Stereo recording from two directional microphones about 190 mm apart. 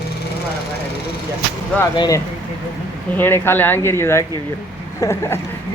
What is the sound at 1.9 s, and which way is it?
Speech, 20° left (ahead or behind).